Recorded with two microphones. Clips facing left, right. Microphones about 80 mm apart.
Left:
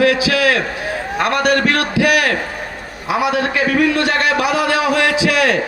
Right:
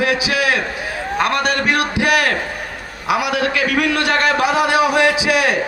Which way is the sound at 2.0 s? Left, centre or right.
Right.